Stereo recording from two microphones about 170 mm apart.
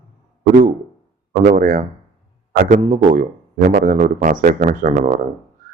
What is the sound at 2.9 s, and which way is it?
Speech, 50° right (ahead or behind).